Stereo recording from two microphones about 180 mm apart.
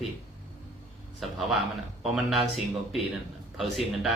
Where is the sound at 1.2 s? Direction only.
Centre (ahead or behind).